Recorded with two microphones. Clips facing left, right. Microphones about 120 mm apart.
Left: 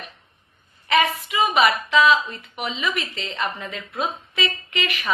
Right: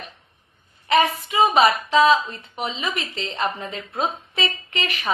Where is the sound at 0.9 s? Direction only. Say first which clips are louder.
Right 1 dB; 35° right (ahead or behind).